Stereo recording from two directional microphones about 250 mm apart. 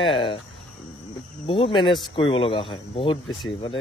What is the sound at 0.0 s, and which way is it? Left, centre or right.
Speech, centre.